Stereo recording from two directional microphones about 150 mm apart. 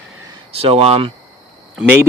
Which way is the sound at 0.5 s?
40° right (ahead or behind).